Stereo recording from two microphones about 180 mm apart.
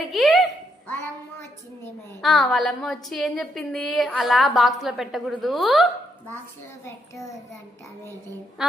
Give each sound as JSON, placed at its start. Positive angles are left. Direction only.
{"t": 0.1, "sound": "a sound", "side_deg": 0}
{"t": 2.2, "sound": "a woman's voice", "side_deg": 0}
{"t": 6.8, "sound": "child singing", "side_deg": 15}